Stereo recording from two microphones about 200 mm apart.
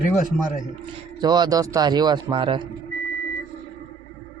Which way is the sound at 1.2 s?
20° right (ahead or behind).